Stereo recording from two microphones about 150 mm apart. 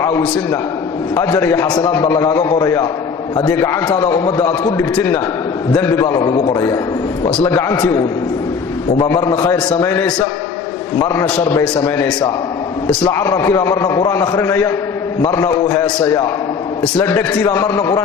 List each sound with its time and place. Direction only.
0.0 s a man's voice: 20° left (ahead or behind)
9.0 s a man's voice: 20° left (ahead or behind)
13.1 s a man's voice: 15° left (ahead or behind)